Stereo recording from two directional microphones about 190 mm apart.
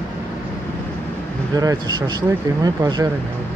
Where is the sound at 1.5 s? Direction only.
20° right (ahead or behind).